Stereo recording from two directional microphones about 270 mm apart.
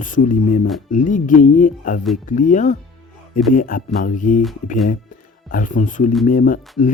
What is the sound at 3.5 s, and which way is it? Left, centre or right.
Mantra, left.